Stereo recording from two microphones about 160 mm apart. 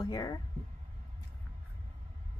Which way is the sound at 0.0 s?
25° left (ahead or behind).